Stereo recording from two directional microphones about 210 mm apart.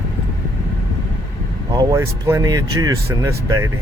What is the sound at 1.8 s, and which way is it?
Speech, 15° right (ahead or behind).